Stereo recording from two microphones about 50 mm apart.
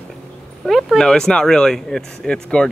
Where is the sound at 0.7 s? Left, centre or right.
Centre.